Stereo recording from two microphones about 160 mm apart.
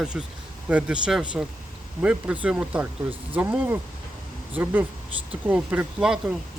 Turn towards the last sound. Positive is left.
turn(degrees=-5)  # may be behind; listen again after turning